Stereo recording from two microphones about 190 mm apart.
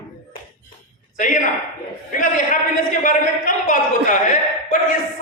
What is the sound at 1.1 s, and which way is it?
Speech, 40° left (ahead or behind).